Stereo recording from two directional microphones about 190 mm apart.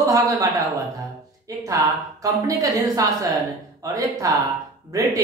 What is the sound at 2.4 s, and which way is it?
A woman's voice, 20° right (ahead or behind).